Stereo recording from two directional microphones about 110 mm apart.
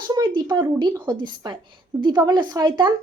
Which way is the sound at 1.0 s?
40° right (ahead or behind).